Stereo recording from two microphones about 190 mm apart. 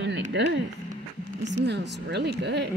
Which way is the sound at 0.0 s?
65° right (ahead or behind).